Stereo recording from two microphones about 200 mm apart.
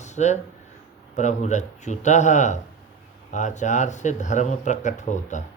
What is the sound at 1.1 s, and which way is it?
Speech, 35° left (ahead or behind).